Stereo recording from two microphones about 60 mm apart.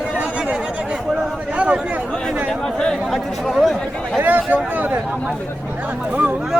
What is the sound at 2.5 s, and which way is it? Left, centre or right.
Chatter, centre.